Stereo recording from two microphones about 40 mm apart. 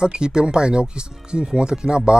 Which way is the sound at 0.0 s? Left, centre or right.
Centre.